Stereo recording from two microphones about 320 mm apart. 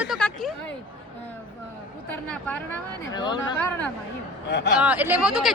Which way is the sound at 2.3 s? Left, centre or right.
Centre.